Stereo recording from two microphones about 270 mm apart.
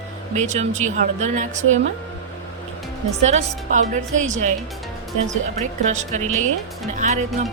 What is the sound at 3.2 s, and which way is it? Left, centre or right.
A woman's voice, right.